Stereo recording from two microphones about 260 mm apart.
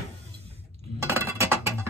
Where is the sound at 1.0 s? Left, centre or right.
Centre.